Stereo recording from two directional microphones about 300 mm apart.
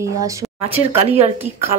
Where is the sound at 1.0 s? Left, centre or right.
Right.